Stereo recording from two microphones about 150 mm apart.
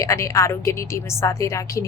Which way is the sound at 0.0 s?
20° left (ahead or behind).